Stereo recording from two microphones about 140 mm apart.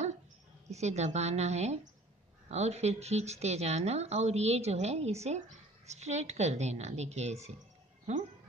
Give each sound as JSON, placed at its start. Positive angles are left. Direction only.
{"t": 0.7, "sound": "a woman's voice", "side_deg": -50}